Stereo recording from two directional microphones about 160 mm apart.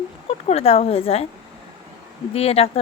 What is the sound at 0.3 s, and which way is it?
Speech, 35° left (ahead or behind).